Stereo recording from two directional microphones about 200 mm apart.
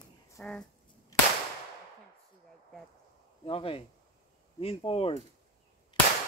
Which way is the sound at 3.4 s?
25° left (ahead or behind).